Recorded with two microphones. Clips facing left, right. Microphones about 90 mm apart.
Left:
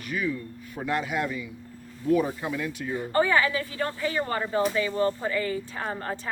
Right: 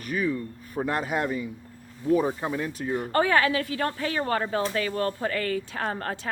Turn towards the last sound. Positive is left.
turn(degrees=-65)  # may be behind; listen again after turning